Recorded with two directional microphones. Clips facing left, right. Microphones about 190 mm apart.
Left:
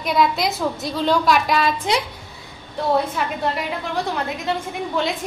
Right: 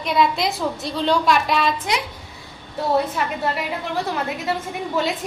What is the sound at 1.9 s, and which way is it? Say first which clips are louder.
Speech: left 3 dB; 25° left (ahead or behind).